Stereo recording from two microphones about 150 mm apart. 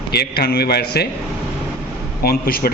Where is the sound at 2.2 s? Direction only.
90° left.